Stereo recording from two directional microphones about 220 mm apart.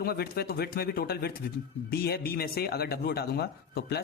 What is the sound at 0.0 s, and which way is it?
A man's voice, 45° left (ahead or behind).